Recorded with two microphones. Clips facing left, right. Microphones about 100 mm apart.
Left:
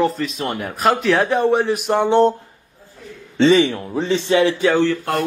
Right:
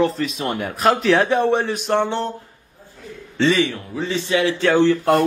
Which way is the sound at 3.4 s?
20° left (ahead or behind).